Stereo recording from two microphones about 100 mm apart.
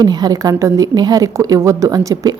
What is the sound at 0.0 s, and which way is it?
A woman's voice, 45° right (ahead or behind).